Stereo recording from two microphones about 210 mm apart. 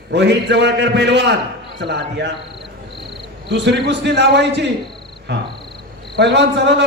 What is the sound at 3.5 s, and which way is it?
A man's voice, 55° right (ahead or behind).